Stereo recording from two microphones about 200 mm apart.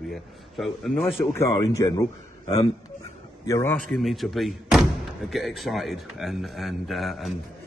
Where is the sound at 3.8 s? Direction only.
Centre (ahead or behind).